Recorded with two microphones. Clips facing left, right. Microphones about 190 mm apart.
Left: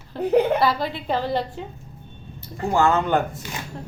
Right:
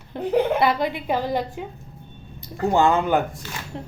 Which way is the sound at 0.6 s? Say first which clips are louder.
Right 1 dB; 20° right (ahead or behind).